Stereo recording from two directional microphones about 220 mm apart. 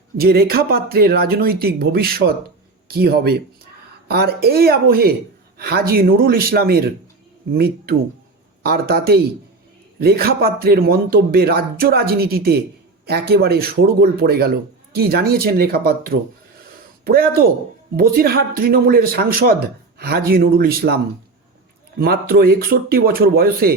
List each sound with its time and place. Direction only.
0.2 s speech: 45° right (ahead or behind)